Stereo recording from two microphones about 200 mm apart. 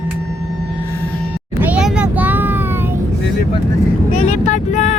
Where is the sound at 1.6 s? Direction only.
5° right (ahead or behind).